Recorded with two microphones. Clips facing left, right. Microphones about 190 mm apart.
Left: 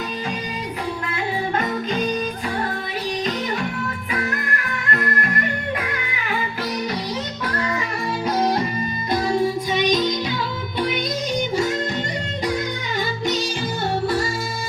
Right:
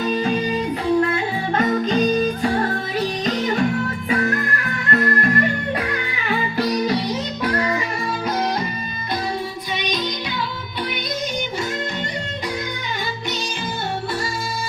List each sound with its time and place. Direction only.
1.5 s music: 40° right (ahead or behind)
4.9 s music: 35° right (ahead or behind)
9.4 s music: 45° left (ahead or behind)